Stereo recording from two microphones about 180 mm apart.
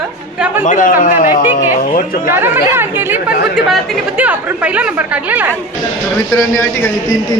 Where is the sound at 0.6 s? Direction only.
45° left (ahead or behind).